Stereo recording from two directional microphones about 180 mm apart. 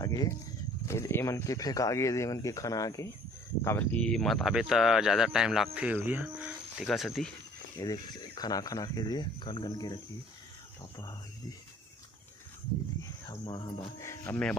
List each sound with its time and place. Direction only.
0.0 s speech: 20° left (ahead or behind); by 7.3 s centre (ahead or behind)
7.8 s speech: 20° left (ahead or behind)
13.0 s speech: 25° left (ahead or behind)
14.0 s speech: 15° left (ahead or behind)